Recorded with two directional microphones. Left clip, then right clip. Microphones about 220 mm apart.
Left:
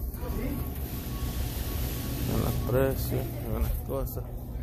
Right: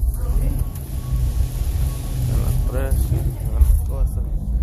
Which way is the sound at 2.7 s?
45° left (ahead or behind).